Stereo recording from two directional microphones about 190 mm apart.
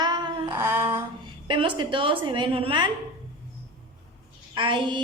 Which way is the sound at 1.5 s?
25° right (ahead or behind).